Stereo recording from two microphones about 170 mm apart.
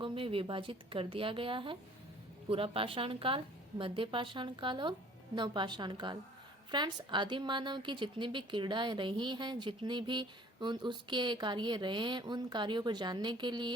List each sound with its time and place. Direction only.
0.0 s a woman's voice: 30° right (ahead or behind)